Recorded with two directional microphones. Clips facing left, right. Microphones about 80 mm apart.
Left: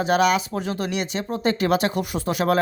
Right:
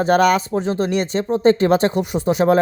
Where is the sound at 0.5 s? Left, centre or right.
Right.